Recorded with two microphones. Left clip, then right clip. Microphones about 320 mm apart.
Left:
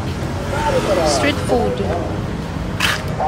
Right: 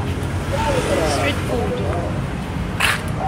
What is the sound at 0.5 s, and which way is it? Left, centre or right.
Vehicle, left.